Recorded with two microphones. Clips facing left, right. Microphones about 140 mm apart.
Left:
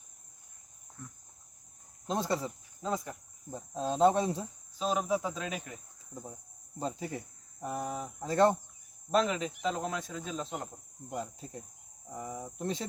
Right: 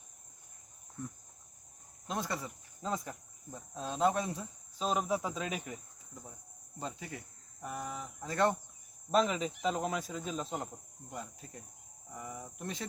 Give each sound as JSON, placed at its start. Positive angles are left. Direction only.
{"t": 2.0, "sound": "speech", "side_deg": 30}
{"t": 2.8, "sound": "speech", "side_deg": 0}
{"t": 3.5, "sound": "speech", "side_deg": 30}
{"t": 4.8, "sound": "speech", "side_deg": 0}
{"t": 6.7, "sound": "speech", "side_deg": 35}
{"t": 9.1, "sound": "speech", "side_deg": 0}
{"t": 11.1, "sound": "speech", "side_deg": 30}